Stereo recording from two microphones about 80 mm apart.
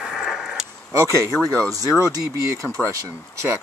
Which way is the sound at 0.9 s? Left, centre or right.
Right.